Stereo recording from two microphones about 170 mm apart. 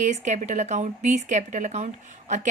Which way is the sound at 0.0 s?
45° right (ahead or behind).